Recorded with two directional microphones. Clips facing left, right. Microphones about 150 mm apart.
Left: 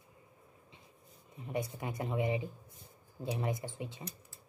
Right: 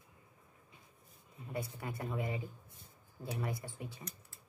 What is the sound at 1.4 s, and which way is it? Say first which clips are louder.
Speech: left 4 dB; 20° left (ahead or behind).